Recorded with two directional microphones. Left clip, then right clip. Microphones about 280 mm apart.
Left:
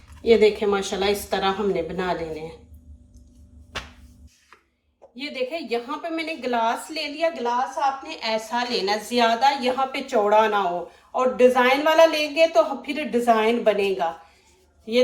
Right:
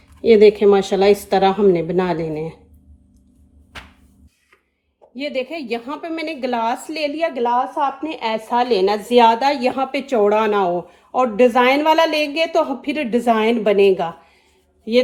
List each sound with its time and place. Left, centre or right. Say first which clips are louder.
0.3 s a woman's voice: right 7 dB; right
5.1 s a woman's voice: right 4 dB; right